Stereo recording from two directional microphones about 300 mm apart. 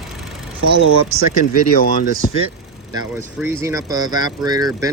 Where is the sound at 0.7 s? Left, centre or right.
Right.